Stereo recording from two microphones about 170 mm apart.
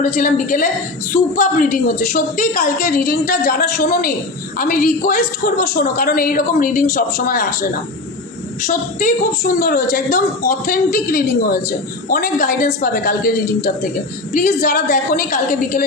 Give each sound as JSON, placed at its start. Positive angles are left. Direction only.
{"t": 0.0, "sound": "a woman's voice", "side_deg": 50}
{"t": 8.6, "sound": "a woman's voice", "side_deg": 45}
{"t": 9.4, "sound": "a woman's voice", "side_deg": 60}